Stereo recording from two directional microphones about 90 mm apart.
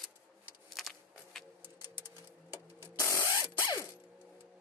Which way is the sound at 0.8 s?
Centre (ahead or behind).